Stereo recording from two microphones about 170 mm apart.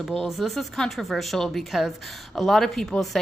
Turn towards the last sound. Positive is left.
turn(degrees=0)  # may be behind; listen again after turning